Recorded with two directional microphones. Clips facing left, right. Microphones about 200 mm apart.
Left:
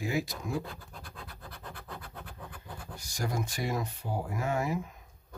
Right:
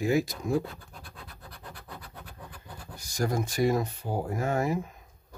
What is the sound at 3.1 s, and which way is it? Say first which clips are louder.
Speech: right 7 dB; 45° right (ahead or behind).